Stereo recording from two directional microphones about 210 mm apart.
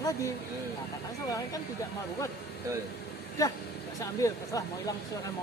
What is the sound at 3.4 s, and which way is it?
Speech, 15° left (ahead or behind).